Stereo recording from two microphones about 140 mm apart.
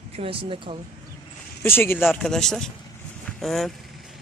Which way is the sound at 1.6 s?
15° left (ahead or behind).